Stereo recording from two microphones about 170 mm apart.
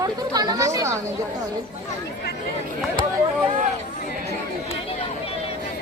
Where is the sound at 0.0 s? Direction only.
20° right (ahead or behind).